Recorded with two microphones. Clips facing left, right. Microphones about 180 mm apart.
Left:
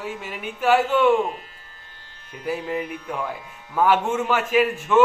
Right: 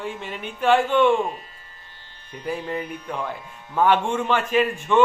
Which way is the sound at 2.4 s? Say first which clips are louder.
Left 1 dB; 5° left (ahead or behind).